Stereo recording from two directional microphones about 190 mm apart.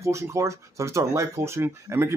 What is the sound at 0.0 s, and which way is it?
Speech, 15° right (ahead or behind).